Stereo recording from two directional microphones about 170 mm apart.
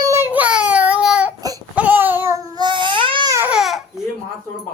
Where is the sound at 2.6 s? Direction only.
25° right (ahead or behind).